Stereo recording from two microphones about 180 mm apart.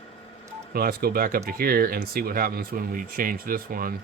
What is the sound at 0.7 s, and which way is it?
Speech, 55° right (ahead or behind).